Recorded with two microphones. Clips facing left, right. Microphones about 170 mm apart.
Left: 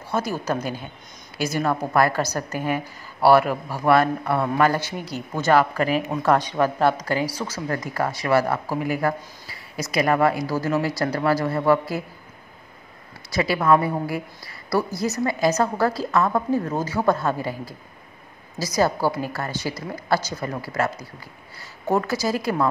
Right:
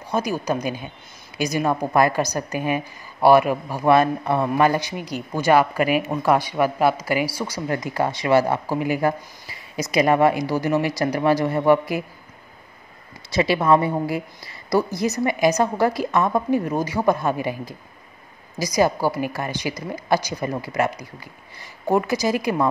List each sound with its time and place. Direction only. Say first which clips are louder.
0.1 s speech: right 2 dB; 15° right (ahead or behind)
13.3 s speech: right 1 dB; 20° right (ahead or behind)